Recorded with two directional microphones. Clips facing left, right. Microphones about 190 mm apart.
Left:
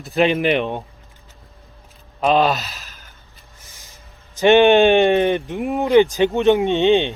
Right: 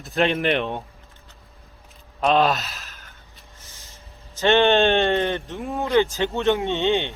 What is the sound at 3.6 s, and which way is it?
Vehicle, 15° left (ahead or behind).